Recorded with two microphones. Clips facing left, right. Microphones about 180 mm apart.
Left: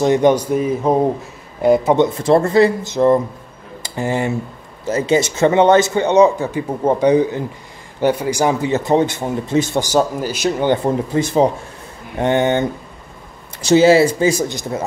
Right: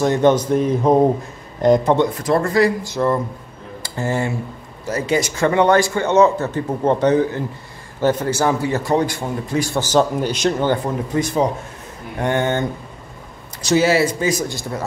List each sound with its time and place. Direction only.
0.0 s speech: 15° left (ahead or behind)
2.0 s a man's voice: 25° left (ahead or behind); by 10.5 s 5° left (ahead or behind)
10.6 s a man's voice: 25° left (ahead or behind)